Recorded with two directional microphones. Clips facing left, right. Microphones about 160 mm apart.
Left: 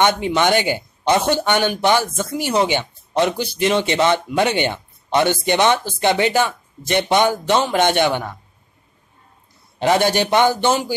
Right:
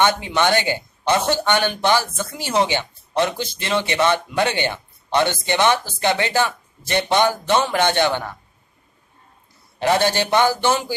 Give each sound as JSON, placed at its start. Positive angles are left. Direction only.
{"t": 0.0, "sound": "a man's voice", "side_deg": 20}
{"t": 9.8, "sound": "a man's voice", "side_deg": 15}